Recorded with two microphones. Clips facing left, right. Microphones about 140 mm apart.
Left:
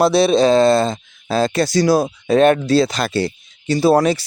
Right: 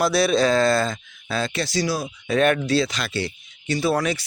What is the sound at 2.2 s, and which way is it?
Speech, 30° left (ahead or behind).